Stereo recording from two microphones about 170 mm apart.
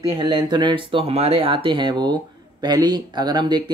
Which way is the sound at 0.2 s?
25° right (ahead or behind).